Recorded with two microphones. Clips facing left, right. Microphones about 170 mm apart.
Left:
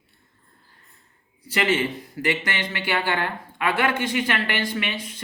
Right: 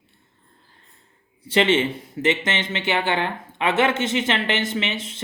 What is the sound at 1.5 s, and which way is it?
Speech, 25° right (ahead or behind).